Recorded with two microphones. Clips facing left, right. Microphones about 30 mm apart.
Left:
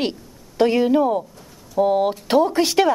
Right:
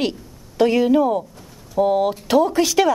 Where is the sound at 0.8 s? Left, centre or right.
Centre.